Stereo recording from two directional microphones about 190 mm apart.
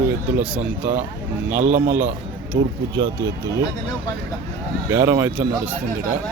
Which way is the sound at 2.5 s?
65° right (ahead or behind).